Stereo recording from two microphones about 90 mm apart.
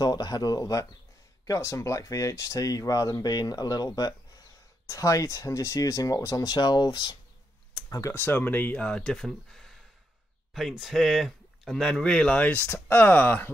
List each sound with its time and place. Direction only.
0.0 s speech: 45° left (ahead or behind)
7.7 s computer keyboard: 45° left (ahead or behind)
8.1 s speech: 25° left (ahead or behind)